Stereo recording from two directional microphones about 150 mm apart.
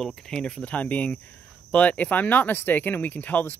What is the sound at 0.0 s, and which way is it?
Speech, 5° left (ahead or behind).